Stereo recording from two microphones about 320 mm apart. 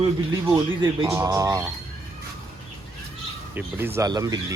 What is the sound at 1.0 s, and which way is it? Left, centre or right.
Speech, centre.